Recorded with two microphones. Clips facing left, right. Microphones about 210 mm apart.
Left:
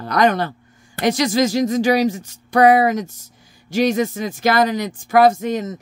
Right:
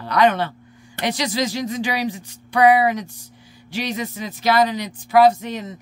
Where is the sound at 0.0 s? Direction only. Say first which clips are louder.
Left 1 dB; 45° left (ahead or behind).